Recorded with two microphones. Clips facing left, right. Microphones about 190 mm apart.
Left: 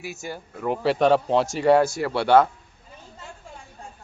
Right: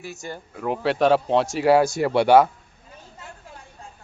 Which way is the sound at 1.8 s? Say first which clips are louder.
Right 3 dB; 20° right (ahead or behind).